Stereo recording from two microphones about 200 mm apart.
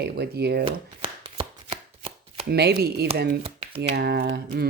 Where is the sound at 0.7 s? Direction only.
25° right (ahead or behind).